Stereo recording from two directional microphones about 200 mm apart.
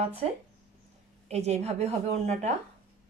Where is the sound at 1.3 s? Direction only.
30° right (ahead or behind).